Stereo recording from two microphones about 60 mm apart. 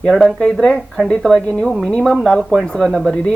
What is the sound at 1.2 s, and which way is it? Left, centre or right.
Speech, centre.